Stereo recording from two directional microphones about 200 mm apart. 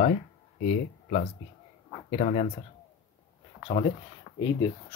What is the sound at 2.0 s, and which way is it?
Speech, 30° left (ahead or behind).